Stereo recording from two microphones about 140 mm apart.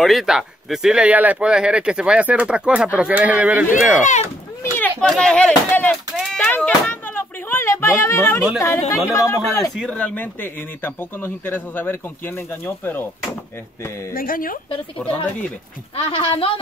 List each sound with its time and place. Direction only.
0.0 s speech: centre (ahead or behind)
4.0 s speech: 55° left (ahead or behind)
5.0 s a man's voice: 5° left (ahead or behind); by 9.7 s 20° left (ahead or behind)
9.8 s a man's voice: 10° left (ahead or behind)
14.1 s speech: 90° left
16.0 s a woman's voice: 40° left (ahead or behind)